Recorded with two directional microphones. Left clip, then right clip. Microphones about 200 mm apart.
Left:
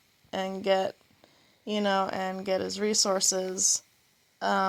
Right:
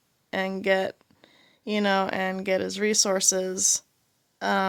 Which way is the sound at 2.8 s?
75° right (ahead or behind).